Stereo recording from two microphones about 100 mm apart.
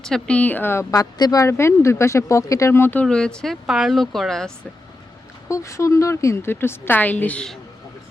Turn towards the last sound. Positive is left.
turn(degrees=10)  # may be behind; listen again after turning